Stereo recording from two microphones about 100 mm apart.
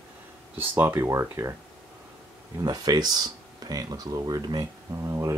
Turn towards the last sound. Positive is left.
turn(degrees=-30)  # may be behind; listen again after turning